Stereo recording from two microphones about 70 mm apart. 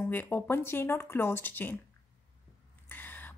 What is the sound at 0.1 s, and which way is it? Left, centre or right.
A woman's voice, left.